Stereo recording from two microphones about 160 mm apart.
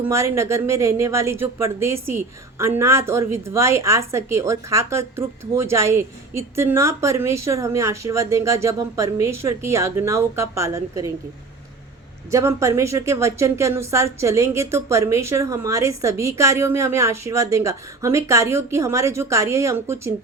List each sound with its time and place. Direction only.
0.0 s speech: 15° right (ahead or behind)
12.3 s speech: 20° right (ahead or behind)